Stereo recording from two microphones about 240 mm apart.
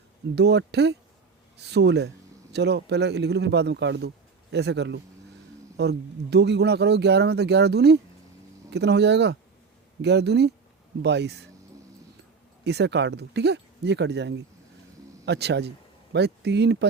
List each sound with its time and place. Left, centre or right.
0.3 s speech: right
12.6 s speech: right